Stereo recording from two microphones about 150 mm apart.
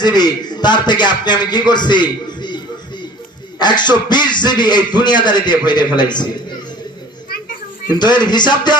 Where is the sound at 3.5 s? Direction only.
30° left (ahead or behind).